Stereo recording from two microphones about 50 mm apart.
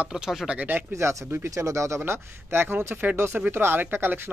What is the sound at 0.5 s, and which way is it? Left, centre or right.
Speech, right.